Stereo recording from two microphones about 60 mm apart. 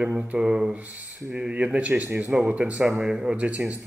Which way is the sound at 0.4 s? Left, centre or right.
Centre.